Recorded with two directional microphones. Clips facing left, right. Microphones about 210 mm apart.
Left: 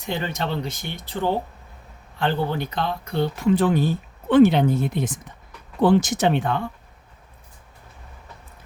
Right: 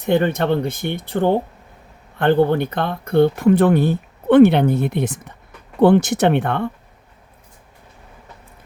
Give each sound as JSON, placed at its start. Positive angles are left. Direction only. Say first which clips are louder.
{"t": 0.0, "sound": "speech", "louder": "right 10 dB", "side_deg": -55}